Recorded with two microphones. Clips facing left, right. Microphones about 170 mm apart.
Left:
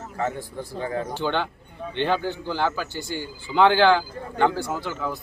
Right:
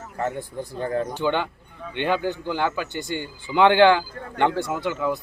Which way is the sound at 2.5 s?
60° right (ahead or behind).